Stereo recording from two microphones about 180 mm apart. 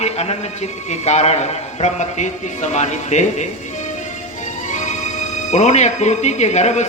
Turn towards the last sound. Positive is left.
turn(degrees=40)  # may be behind; listen again after turning